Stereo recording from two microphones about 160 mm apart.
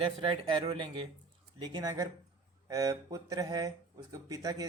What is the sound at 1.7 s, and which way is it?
Speech, 25° right (ahead or behind).